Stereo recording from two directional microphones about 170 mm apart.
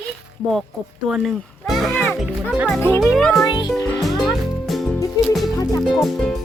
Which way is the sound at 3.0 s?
Centre (ahead or behind).